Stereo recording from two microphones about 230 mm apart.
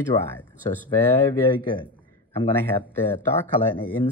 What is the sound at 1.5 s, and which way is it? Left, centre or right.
Speech, centre.